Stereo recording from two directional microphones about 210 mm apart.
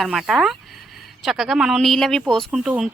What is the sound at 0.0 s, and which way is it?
Speech, centre (ahead or behind).